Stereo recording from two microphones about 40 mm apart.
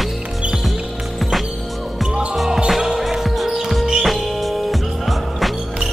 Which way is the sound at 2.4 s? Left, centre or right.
Centre.